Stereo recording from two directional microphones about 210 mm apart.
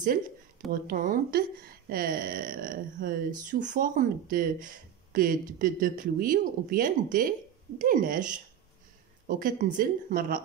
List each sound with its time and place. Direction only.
0.7 s speech: 40° right (ahead or behind)
9.3 s speech: 40° right (ahead or behind)